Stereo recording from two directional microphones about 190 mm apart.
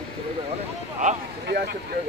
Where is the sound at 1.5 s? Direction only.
60° right (ahead or behind).